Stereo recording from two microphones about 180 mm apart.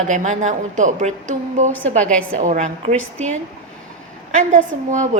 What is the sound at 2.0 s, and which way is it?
Speech, 5° left (ahead or behind).